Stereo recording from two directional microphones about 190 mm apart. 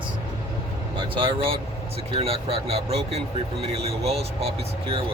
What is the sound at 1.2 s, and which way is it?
Speech, 25° right (ahead or behind).